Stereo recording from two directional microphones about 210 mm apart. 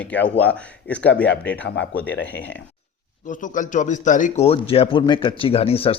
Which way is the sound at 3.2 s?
40° left (ahead or behind).